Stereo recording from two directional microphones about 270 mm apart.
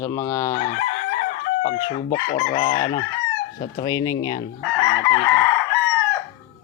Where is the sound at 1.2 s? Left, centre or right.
Left.